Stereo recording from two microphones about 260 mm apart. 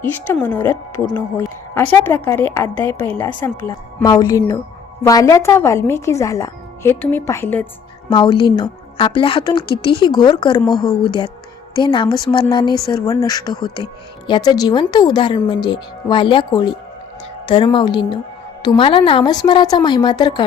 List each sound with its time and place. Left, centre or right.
0.0 s speech: centre
8.1 s speech: centre